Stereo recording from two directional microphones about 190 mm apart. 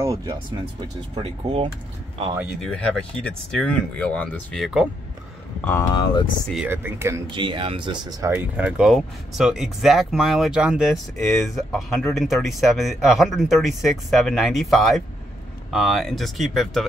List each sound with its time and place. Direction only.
0.0 s speech: 20° right (ahead or behind)
2.6 s speech: 5° left (ahead or behind)
5.6 s speech: 10° left (ahead or behind)
5.9 s speech: 25° left (ahead or behind)
6.5 s speech: 10° right (ahead or behind)
7.3 s speech: 25° right (ahead or behind)
8.3 s speech: 5° right (ahead or behind)